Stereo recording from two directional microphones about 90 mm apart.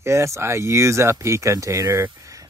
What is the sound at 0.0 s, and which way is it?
Speech, 30° right (ahead or behind).